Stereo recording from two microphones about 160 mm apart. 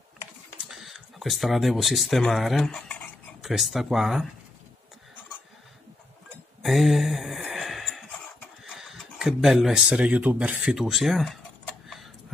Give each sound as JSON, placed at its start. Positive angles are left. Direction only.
{"t": 0.7, "sound": "speech", "side_deg": 0}
{"t": 6.6, "sound": "a sound", "side_deg": 0}
{"t": 8.6, "sound": "speech", "side_deg": 0}